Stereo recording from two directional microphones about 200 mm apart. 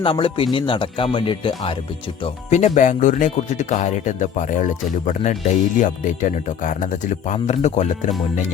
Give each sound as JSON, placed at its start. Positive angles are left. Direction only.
{"t": 0.0, "sound": "speech", "side_deg": 25}